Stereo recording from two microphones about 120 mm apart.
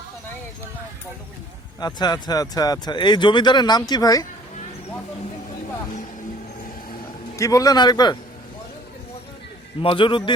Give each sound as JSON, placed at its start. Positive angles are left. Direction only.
{"t": 1.8, "sound": "speech", "side_deg": 35}
{"t": 7.3, "sound": "speech", "side_deg": 25}
{"t": 9.8, "sound": "a man's voice", "side_deg": 45}